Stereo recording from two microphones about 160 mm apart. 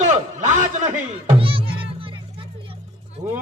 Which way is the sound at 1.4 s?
35° right (ahead or behind).